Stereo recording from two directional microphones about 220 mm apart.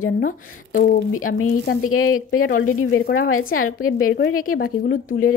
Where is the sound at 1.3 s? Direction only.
80° left.